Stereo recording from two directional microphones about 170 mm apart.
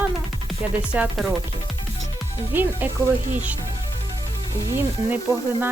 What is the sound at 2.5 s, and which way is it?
Speech, 10° right (ahead or behind).